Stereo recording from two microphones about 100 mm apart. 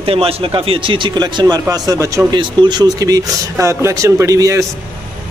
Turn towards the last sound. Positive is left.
turn(degrees=-35)  # may be behind; listen again after turning